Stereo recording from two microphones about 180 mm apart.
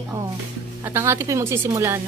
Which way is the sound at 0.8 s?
15° right (ahead or behind).